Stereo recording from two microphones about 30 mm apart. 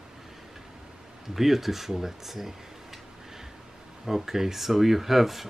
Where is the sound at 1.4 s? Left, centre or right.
Centre.